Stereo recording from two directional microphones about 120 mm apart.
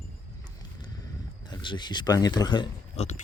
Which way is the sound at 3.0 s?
75° left (ahead or behind).